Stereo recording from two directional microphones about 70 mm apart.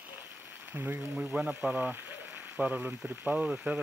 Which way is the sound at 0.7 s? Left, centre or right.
Right.